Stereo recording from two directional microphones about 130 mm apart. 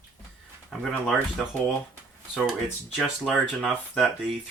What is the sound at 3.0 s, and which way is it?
Speech, centre (ahead or behind).